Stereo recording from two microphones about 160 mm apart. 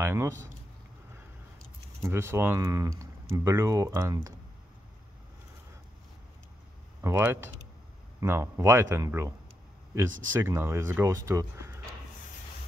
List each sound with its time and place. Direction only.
0.0 s speech: 15° right (ahead or behind)
2.0 s speech: 15° right (ahead or behind)
7.0 s speech: 15° right (ahead or behind)
10.4 s speech: 15° right (ahead or behind)